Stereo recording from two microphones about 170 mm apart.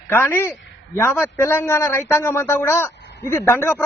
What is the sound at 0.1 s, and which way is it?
Speech, 15° left (ahead or behind).